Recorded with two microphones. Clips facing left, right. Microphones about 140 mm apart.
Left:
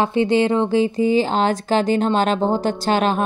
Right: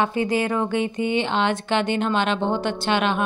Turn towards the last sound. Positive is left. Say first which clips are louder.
# left 3 dB
turn(degrees=40)  # may be behind; listen again after turning